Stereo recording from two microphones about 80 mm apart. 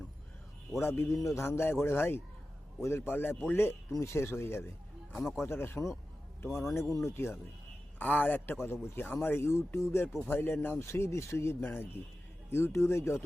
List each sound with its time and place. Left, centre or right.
0.8 s a man's voice: left
7.9 s a man's voice: left